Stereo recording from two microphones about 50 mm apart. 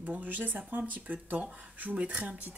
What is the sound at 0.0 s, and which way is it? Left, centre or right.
Speech, right.